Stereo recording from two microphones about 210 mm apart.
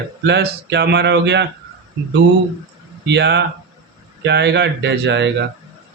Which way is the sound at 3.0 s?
55° right (ahead or behind).